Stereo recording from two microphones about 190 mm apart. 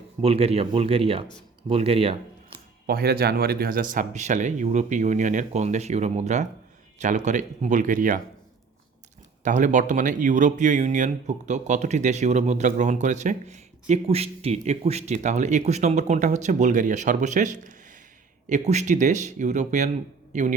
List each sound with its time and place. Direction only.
0.2 s speech: 30° right (ahead or behind)
2.8 s speech: 55° right (ahead or behind)
9.4 s speech: 40° right (ahead or behind)